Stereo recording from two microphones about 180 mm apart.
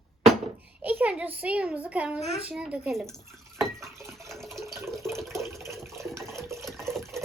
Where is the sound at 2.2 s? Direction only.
35° left (ahead or behind).